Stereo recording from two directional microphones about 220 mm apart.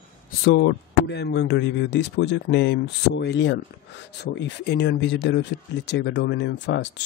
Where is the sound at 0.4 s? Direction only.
50° left (ahead or behind).